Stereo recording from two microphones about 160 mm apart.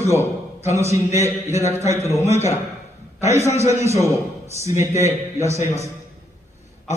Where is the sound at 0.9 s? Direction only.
20° right (ahead or behind).